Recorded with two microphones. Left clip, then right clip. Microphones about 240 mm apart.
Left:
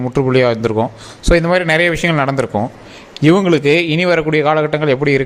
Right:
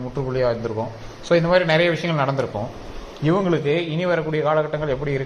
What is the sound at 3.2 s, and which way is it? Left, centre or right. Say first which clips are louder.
A man's voice: left 9 dB; left.